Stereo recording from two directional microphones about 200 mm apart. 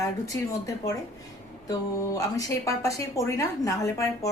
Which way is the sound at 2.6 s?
15° left (ahead or behind).